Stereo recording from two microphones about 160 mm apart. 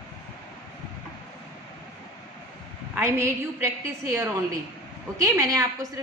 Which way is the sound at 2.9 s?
15° right (ahead or behind).